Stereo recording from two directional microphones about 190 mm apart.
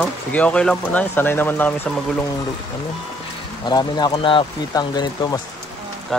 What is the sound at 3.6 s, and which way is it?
Speech, 20° left (ahead or behind).